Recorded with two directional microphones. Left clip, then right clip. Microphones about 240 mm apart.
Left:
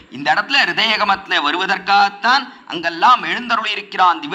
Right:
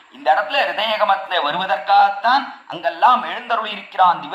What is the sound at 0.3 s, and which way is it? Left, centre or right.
A man's voice, left.